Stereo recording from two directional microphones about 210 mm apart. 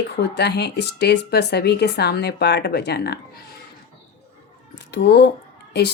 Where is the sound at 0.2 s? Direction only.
50° left (ahead or behind).